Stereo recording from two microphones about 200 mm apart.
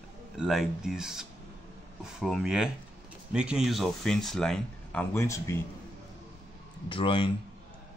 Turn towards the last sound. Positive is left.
turn(degrees=25)  # may be behind; listen again after turning